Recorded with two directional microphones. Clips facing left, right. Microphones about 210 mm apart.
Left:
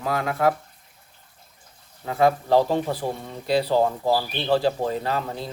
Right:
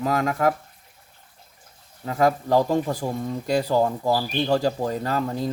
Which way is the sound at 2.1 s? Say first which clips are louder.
Left 1 dB; 45° right (ahead or behind).